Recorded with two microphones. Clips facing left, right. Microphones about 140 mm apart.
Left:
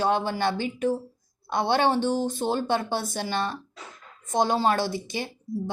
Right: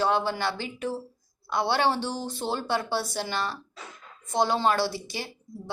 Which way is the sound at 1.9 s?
50° left (ahead or behind).